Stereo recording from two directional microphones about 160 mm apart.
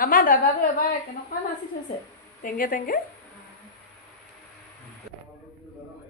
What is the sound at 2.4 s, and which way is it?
Speech, 60° left (ahead or behind).